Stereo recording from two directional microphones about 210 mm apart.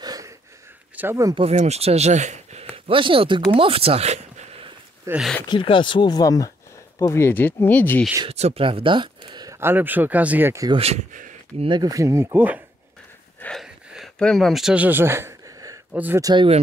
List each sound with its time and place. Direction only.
0.0 s wheeze: 20° right (ahead or behind)
0.9 s speech: 10° right (ahead or behind)
1.4 s speech: 30° right (ahead or behind)
5.0 s speech: 5° right (ahead or behind)
5.5 s speech: 25° left (ahead or behind); by 8.1 s 10° left (ahead or behind)
8.2 s speech: 30° right (ahead or behind)
10.8 s speech: 30° right (ahead or behind)
11.7 s speech: 15° right (ahead or behind)
13.4 s a sound: centre (ahead or behind); by 16.4 s 15° right (ahead or behind)